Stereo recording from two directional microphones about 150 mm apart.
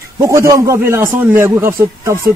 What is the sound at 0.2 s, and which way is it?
A man's voice, 20° right (ahead or behind).